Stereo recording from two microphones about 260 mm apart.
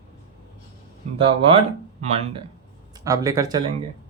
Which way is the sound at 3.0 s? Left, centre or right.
Centre.